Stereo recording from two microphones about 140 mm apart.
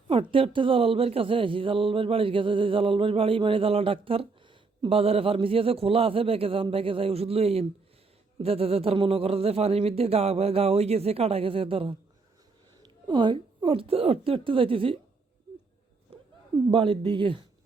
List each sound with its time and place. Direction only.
0.1 s speech: 40° right (ahead or behind)
13.1 s speech: 35° right (ahead or behind)
16.7 s speech: 35° right (ahead or behind)